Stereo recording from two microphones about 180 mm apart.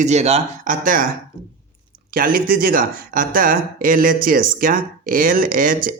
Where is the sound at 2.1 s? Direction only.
50° right (ahead or behind).